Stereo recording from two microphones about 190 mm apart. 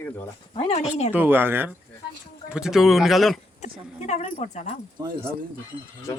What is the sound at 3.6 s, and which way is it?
Speech, 35° left (ahead or behind).